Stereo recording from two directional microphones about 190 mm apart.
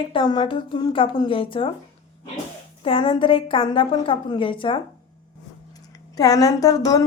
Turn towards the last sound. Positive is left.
turn(degrees=20)  # may be behind; listen again after turning